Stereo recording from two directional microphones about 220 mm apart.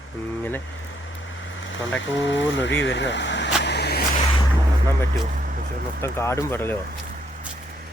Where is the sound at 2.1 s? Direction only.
55° left (ahead or behind).